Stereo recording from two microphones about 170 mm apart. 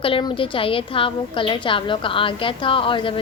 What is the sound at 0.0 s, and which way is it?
A woman's voice, 30° left (ahead or behind).